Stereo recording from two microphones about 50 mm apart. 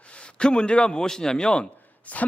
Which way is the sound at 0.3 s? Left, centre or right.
Centre.